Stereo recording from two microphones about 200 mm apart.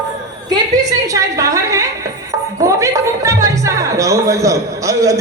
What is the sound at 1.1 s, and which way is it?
Speech, 15° right (ahead or behind).